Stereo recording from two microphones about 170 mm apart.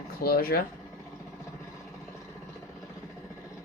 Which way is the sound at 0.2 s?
65° left (ahead or behind).